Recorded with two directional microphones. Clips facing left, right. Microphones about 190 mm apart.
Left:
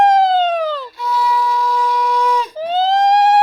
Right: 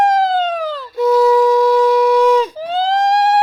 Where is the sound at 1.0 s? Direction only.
45° right (ahead or behind).